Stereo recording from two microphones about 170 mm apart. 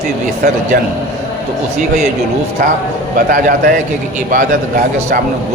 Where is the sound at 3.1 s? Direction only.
55° right (ahead or behind).